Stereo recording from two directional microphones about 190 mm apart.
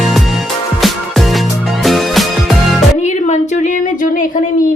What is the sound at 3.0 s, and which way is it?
Music, 40° left (ahead or behind).